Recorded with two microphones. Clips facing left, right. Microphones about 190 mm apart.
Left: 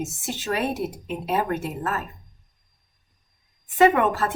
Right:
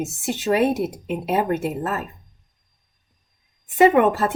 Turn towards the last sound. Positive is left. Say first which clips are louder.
# right 3 dB
turn(degrees=-20)  # may be behind; listen again after turning